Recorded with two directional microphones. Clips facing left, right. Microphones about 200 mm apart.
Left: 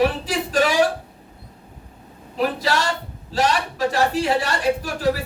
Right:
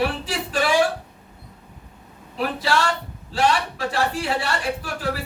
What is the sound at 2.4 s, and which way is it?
A man's voice, 40° left (ahead or behind).